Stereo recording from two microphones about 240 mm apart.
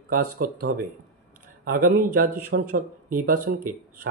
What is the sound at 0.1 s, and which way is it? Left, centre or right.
A man's voice, right.